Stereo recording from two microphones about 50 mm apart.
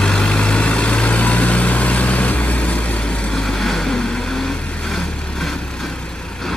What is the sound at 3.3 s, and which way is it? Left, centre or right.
Vehicle, centre.